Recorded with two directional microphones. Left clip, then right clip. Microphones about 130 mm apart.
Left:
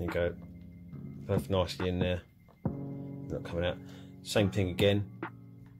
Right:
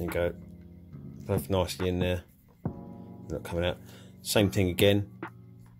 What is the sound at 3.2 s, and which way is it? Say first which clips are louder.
Speech: right 3 dB; 55° right (ahead or behind).